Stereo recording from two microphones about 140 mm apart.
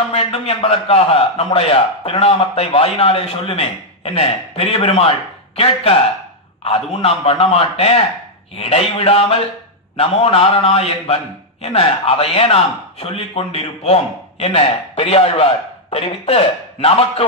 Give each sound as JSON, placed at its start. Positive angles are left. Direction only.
{"t": 0.1, "sound": "a man's voice", "side_deg": 50}
{"t": 6.6, "sound": "a man's voice", "side_deg": 50}
{"t": 15.0, "sound": "a man's voice", "side_deg": 45}